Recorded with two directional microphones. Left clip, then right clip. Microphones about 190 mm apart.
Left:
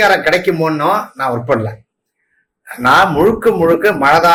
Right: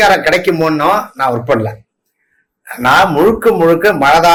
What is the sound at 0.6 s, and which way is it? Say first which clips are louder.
Speech: right 2 dB; 15° left (ahead or behind).